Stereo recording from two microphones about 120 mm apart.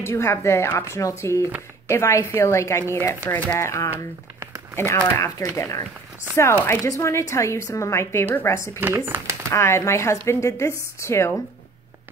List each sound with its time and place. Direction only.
0.0 s speech: 20° left (ahead or behind)
5.1 s speech: 20° left (ahead or behind)
8.7 s speech: 20° right (ahead or behind)
9.5 s speech: 20° left (ahead or behind)